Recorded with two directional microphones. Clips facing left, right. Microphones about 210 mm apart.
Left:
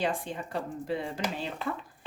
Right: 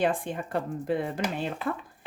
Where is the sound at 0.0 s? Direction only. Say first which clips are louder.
Right 4 dB; 55° right (ahead or behind).